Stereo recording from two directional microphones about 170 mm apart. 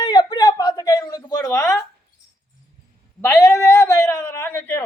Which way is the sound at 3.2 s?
10° left (ahead or behind).